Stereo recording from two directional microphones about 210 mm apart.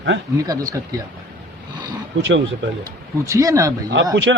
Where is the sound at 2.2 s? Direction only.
65° right (ahead or behind).